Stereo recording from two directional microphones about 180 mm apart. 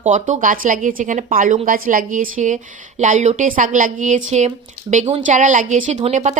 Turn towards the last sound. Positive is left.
turn(degrees=-40)  # may be behind; listen again after turning